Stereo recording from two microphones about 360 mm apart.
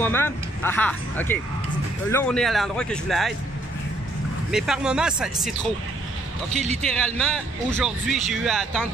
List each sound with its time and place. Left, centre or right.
0.0 s speech: centre
4.5 s speech: centre
6.5 s a man's voice: centre
6.8 s speech: centre